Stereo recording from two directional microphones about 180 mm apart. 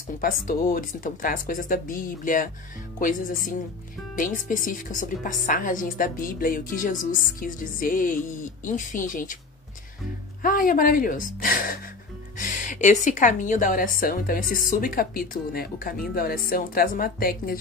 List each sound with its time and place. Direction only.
0.2 s a woman's voice: 50° left (ahead or behind)
10.4 s a woman's voice: 50° left (ahead or behind)